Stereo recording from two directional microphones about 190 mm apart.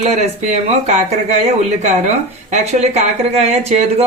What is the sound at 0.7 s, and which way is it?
Speech, 35° right (ahead or behind).